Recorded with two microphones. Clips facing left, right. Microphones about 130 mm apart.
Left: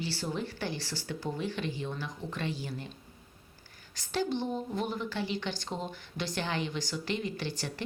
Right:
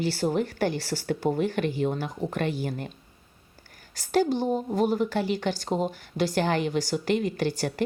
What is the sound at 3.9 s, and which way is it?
A woman's voice, 45° right (ahead or behind).